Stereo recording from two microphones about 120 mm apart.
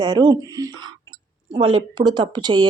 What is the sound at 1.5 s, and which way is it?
Speech, 45° right (ahead or behind).